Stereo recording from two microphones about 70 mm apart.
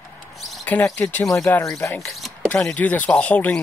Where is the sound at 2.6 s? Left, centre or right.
Left.